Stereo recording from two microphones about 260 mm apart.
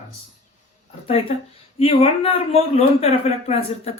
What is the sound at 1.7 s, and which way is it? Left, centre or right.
Speech, left.